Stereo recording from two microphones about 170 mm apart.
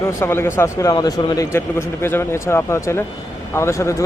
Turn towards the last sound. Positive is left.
turn(degrees=15)  # may be behind; listen again after turning